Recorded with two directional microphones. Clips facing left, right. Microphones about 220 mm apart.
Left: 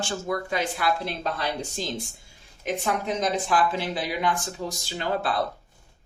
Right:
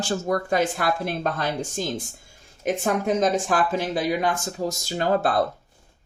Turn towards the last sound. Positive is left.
turn(degrees=-45)  # may be behind; listen again after turning